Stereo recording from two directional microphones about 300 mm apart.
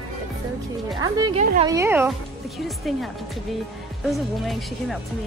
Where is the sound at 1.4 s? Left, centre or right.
Right.